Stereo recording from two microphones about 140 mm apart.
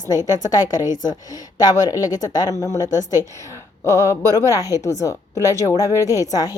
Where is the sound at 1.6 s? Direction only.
25° left (ahead or behind).